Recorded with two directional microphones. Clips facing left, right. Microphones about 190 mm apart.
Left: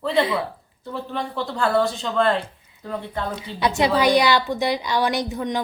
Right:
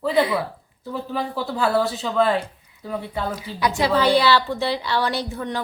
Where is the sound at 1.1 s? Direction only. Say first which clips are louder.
Right 2 dB; 5° right (ahead or behind).